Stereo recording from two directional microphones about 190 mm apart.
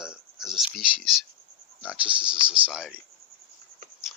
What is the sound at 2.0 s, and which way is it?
Speech, 25° right (ahead or behind).